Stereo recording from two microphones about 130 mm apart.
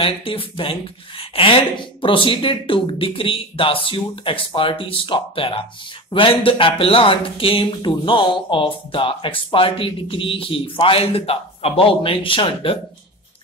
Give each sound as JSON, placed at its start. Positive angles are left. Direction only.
{"t": 0.0, "sound": "speech", "side_deg": 45}